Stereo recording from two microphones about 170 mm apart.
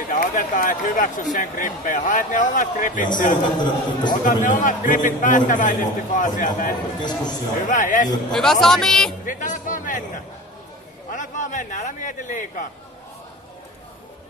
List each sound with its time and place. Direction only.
0.1 s speech: 50° left (ahead or behind)
3.5 s a man's voice: 25° left (ahead or behind)
4.1 s speech: 50° left (ahead or behind)
7.0 s a man's voice: 25° left (ahead or behind)
7.6 s speech: 50° left (ahead or behind)
8.3 s speech: 5° left (ahead or behind)
9.2 s a man's voice: 50° left (ahead or behind)